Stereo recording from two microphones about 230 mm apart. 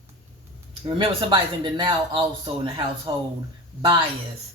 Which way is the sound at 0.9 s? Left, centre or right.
Centre.